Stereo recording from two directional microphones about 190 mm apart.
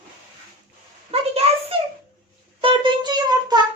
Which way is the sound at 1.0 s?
30° right (ahead or behind).